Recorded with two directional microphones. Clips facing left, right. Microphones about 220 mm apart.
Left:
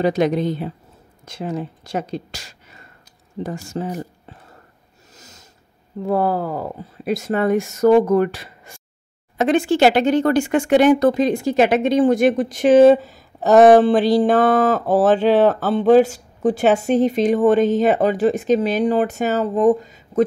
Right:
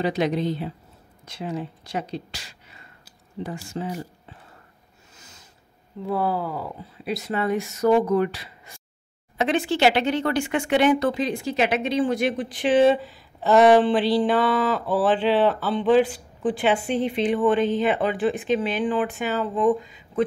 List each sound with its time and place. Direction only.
0.0 s speech: 45° left (ahead or behind)
5.1 s snort: 40° left (ahead or behind)
6.0 s speech: 50° left (ahead or behind)